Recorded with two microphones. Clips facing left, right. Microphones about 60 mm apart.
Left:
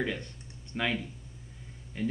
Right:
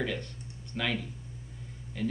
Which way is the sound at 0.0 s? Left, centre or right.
Left.